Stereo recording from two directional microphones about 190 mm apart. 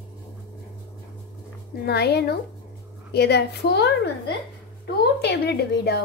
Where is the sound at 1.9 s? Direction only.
60° left (ahead or behind).